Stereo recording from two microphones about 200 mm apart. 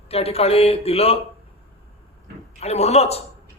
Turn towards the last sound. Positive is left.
turn(degrees=30)  # may be behind; listen again after turning